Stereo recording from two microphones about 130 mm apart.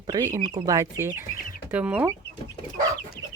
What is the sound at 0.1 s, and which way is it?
Speech, 25° right (ahead or behind).